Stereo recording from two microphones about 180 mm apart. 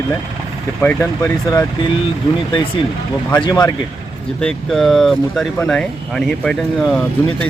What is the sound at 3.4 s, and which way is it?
Speech, 20° left (ahead or behind).